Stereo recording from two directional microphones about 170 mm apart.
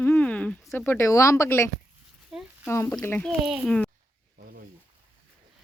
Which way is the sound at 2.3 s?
5° right (ahead or behind).